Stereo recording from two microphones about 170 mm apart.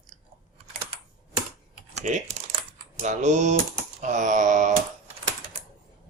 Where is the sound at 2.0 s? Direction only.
50° right (ahead or behind).